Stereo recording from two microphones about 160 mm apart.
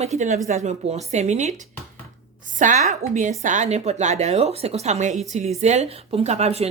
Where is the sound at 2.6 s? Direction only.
50° right (ahead or behind).